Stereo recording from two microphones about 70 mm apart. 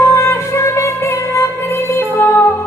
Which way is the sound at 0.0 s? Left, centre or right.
Left.